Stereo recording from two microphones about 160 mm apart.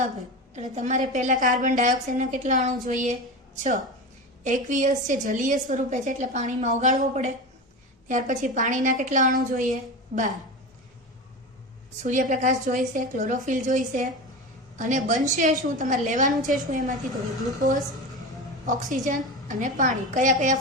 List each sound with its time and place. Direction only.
0.5 s a woman's voice: 50° right (ahead or behind)
4.4 s a woman's voice: 55° right (ahead or behind)
12.0 s a woman's voice: 50° right (ahead or behind)
18.6 s a woman's voice: 55° right (ahead or behind)